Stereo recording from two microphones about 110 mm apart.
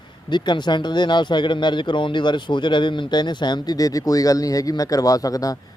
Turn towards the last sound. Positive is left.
turn(degrees=35)  # may be behind; listen again after turning